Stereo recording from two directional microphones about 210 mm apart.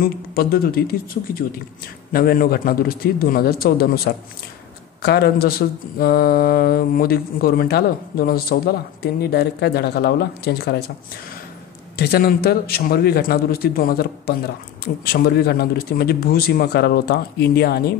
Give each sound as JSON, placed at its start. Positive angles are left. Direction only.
{"t": 0.0, "sound": "speech", "side_deg": 45}
{"t": 12.0, "sound": "speech", "side_deg": 45}